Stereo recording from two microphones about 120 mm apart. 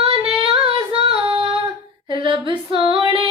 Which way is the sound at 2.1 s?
40° right (ahead or behind).